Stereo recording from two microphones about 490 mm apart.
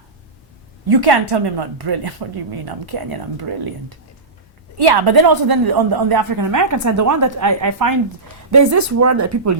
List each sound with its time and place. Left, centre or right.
0.9 s a woman's voice: right